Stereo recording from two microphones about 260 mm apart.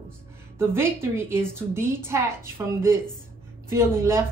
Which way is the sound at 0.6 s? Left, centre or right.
Centre.